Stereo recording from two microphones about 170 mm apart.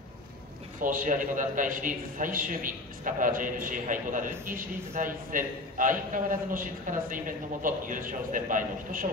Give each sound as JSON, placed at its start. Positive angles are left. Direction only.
{"t": 0.7, "sound": "a man's voice", "side_deg": -50}